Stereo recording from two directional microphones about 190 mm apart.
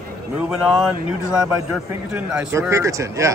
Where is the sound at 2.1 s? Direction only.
5° right (ahead or behind).